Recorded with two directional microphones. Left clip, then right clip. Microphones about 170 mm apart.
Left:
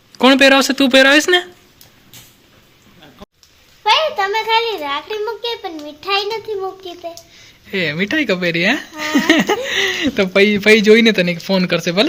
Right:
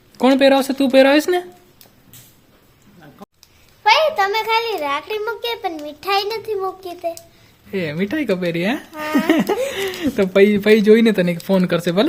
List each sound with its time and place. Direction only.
0.2 s speech: 5° right (ahead or behind)
3.9 s a child's voice: 20° right (ahead or behind)
7.7 s speech: 10° right (ahead or behind)